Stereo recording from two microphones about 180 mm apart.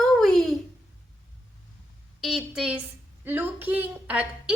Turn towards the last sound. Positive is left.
turn(degrees=-5)  # may be behind; listen again after turning